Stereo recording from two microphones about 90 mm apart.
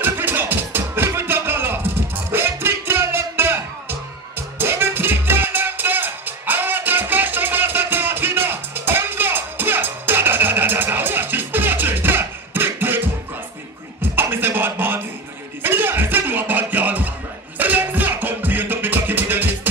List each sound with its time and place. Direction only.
0.0 s music: 20° right (ahead or behind)
14.0 s music: 25° right (ahead or behind)